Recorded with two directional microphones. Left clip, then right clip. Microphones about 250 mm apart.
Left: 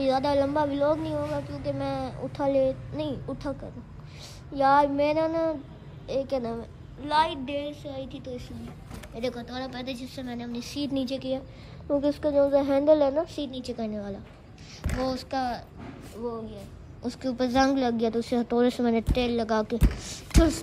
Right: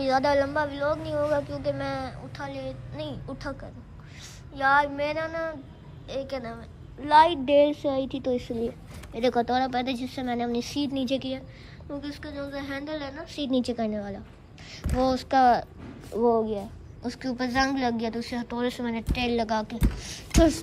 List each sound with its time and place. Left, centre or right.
0.0 s a woman's voice: centre
4.6 s a woman's voice: centre
12.0 s a woman's voice: centre
13.5 s a woman's voice: centre
17.0 s a woman's voice: centre